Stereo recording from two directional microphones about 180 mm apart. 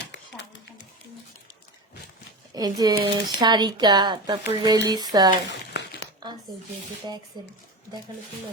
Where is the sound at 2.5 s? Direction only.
20° right (ahead or behind).